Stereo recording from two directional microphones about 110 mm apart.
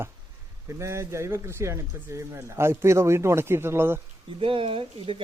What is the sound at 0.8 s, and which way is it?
Speech, 25° right (ahead or behind).